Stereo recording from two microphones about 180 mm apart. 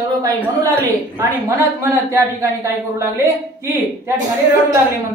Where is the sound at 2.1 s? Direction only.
15° right (ahead or behind).